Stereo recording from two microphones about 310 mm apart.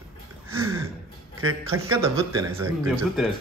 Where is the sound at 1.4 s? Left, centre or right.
Right.